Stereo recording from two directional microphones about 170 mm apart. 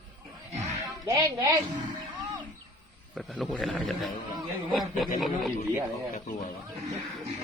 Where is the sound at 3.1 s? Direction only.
Centre (ahead or behind).